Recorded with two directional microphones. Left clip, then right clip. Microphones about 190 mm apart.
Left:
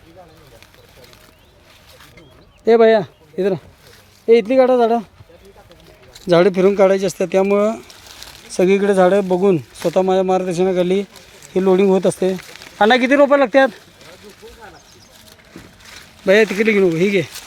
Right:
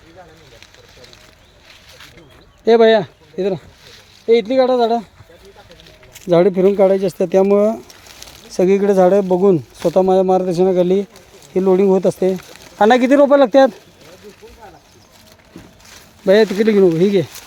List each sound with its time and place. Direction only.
2.6 s speech: 5° right (ahead or behind); by 5.0 s 10° left (ahead or behind)
6.2 s speech: 5° right (ahead or behind); by 7.7 s 20° right (ahead or behind)
7.7 s speech: 10° right (ahead or behind)
9.9 s speech: 30° right (ahead or behind)
11.5 s speech: centre (ahead or behind)
12.8 s speech: 25° right (ahead or behind)
16.2 s speech: 25° right (ahead or behind)